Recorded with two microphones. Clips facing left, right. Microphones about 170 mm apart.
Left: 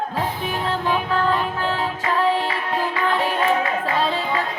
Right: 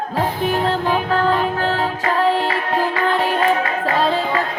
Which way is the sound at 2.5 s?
80° right.